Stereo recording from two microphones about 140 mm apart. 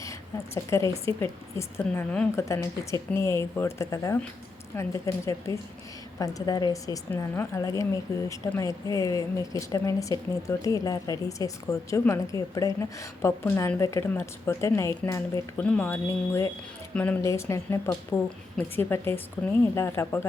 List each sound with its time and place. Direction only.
0.5 s a woman's voice: 20° left (ahead or behind)
1.8 s speech: 5° left (ahead or behind)
2.3 s a woman's voice: 20° left (ahead or behind)
15.6 s speech: 10° left (ahead or behind)
17.2 s a woman's voice: 20° left (ahead or behind)